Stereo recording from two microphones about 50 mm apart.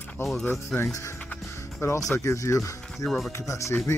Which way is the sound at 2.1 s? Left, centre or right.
Left.